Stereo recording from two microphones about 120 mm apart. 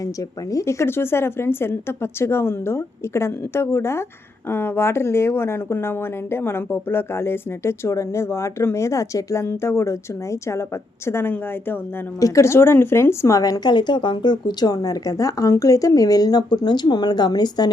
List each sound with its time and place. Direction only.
0.5 s speech: 25° left (ahead or behind)